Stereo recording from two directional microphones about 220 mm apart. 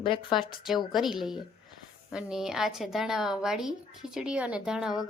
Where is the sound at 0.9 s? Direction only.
Centre (ahead or behind).